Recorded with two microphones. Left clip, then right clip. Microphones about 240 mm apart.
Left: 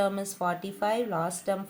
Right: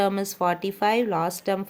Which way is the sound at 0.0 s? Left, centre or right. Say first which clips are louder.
Right 5 dB; right.